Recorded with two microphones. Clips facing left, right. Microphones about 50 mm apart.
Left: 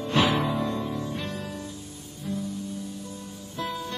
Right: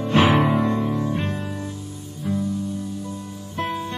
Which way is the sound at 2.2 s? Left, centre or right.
Right.